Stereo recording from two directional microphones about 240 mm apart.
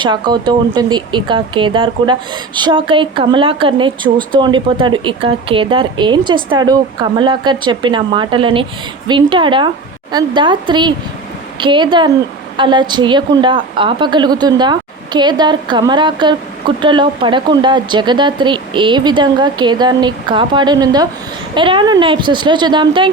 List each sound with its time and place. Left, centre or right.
0.0 s a woman's voice: centre